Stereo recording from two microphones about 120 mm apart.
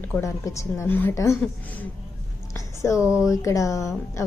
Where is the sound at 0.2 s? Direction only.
25° left (ahead or behind).